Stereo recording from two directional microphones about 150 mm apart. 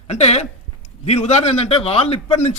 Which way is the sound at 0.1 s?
45° left (ahead or behind).